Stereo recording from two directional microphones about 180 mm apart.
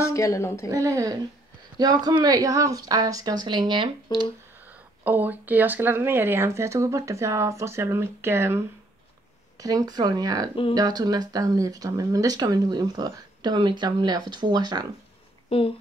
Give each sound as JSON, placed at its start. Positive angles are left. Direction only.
{"t": 0.0, "sound": "a woman's voice", "side_deg": 15}
{"t": 0.7, "sound": "speech", "side_deg": -20}
{"t": 4.6, "sound": "speech", "side_deg": -10}
{"t": 15.5, "sound": "speech", "side_deg": 35}